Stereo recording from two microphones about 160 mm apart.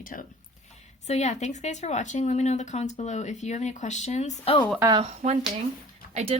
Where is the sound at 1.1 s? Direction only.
45° left (ahead or behind).